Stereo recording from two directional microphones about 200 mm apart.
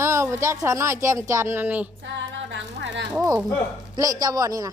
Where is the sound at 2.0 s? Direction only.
65° right (ahead or behind).